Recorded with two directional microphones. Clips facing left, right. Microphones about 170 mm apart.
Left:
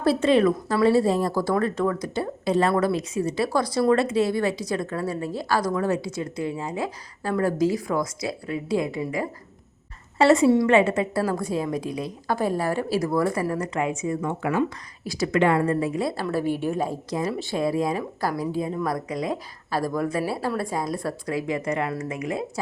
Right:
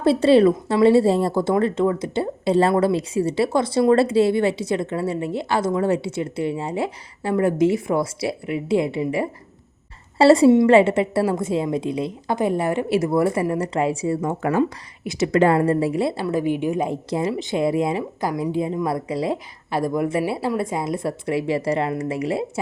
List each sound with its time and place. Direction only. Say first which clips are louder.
0.0 s a woman's voice: right 5 dB; 30° right (ahead or behind)
15.0 s a woman's voice: right 4 dB; 20° right (ahead or behind)
15.3 s a woman's voice: right 4 dB; 35° right (ahead or behind)
16.2 s a woman's voice: right 3 dB; 15° right (ahead or behind); by 22.4 s 30° right (ahead or behind)